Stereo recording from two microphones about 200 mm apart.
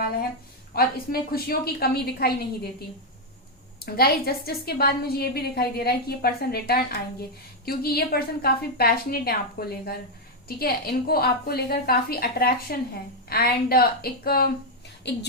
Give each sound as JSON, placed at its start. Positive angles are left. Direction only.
{"t": 0.8, "sound": "a woman's voice", "side_deg": 50}
{"t": 3.8, "sound": "a woman's voice", "side_deg": 50}